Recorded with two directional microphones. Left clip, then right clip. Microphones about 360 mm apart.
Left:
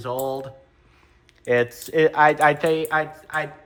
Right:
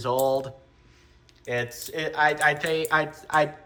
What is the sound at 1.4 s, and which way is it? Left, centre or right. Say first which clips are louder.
Speech: left 8 dB; centre.